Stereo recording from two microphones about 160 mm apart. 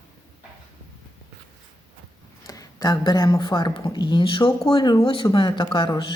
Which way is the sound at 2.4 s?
20° left (ahead or behind).